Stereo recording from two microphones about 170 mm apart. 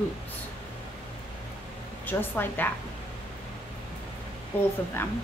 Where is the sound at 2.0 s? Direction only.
10° left (ahead or behind).